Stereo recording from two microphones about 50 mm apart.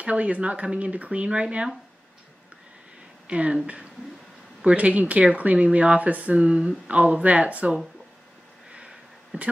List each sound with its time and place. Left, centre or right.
0.0 s speech: right
3.3 s speech: right
4.6 s speech: right
8.7 s sniff: centre